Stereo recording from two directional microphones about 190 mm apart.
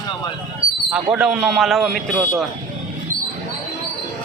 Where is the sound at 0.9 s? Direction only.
5° right (ahead or behind).